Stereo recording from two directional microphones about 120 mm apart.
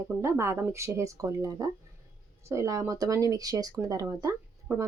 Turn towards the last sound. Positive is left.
turn(degrees=-25)  # may be behind; listen again after turning